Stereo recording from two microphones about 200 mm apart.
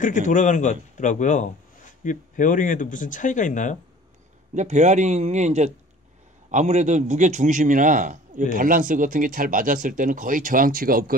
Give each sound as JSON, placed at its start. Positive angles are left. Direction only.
{"t": 0.0, "sound": "speech", "side_deg": 40}
{"t": 4.6, "sound": "a man's voice", "side_deg": -35}